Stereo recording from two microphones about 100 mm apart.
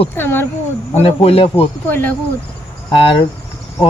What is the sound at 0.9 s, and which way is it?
Speech, 85° left.